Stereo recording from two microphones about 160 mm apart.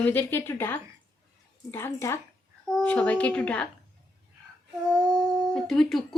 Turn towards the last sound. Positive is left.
turn(degrees=0)  # may be behind; listen again after turning